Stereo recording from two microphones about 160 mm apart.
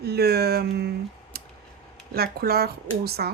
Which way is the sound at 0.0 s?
85° right.